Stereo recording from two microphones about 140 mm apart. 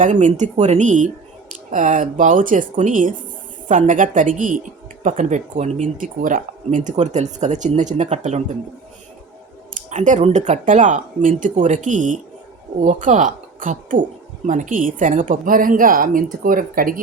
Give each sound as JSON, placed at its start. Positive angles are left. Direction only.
{"t": 0.0, "sound": "speech", "side_deg": -65}
{"t": 9.7, "sound": "a sound", "side_deg": -60}
{"t": 10.2, "sound": "a woman's voice", "side_deg": -55}